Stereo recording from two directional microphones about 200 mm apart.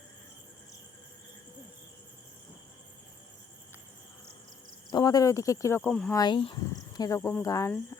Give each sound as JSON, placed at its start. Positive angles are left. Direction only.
{"t": 4.9, "sound": "speech", "side_deg": 20}
{"t": 6.1, "sound": "speech", "side_deg": 25}